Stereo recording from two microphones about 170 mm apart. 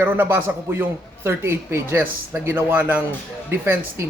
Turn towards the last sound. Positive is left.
turn(degrees=-15)  # may be behind; listen again after turning